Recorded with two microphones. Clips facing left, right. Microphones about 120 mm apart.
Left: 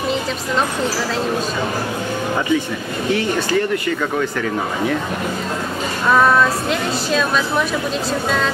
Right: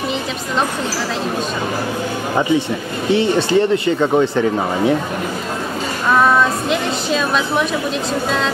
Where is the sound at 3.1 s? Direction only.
25° right (ahead or behind).